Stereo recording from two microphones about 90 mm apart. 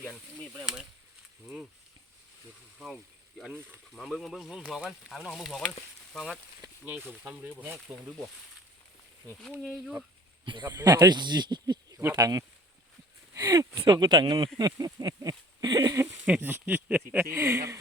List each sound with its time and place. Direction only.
0.6 s speech: 10° right (ahead or behind)
2.7 s speech: centre (ahead or behind)
3.5 s speech: 20° right (ahead or behind)
3.9 s speech: centre (ahead or behind)
7.1 s speech: 20° right (ahead or behind)
10.4 s speech: 55° right (ahead or behind)
13.8 s speech: 55° right (ahead or behind)
16.0 s speech: 20° right (ahead or behind)
17.2 s speech: 30° right (ahead or behind)